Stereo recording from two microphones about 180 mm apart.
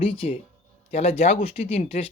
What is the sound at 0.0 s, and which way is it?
Speech, 30° left (ahead or behind).